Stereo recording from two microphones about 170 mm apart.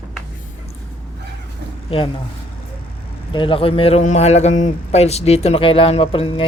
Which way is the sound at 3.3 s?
30° left (ahead or behind).